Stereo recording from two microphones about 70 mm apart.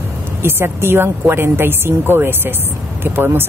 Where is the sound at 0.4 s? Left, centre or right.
Right.